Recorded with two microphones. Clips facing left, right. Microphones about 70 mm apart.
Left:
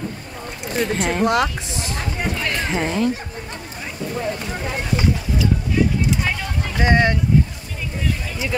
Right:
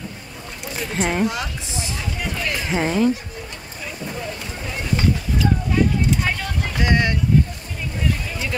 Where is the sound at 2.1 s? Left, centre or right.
Left.